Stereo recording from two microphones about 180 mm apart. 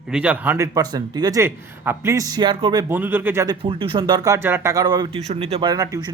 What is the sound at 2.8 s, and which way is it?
Speech, 10° right (ahead or behind).